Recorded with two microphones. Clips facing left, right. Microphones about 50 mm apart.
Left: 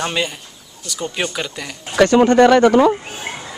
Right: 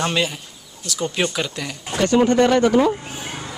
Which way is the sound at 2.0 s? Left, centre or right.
Left.